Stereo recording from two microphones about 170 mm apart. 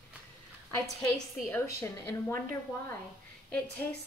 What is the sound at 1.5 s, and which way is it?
Speech, 15° left (ahead or behind).